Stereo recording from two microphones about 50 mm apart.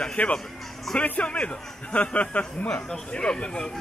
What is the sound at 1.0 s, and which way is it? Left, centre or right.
A man's voice, left.